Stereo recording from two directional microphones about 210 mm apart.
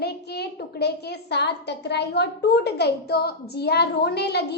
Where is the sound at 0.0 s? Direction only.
50° left (ahead or behind).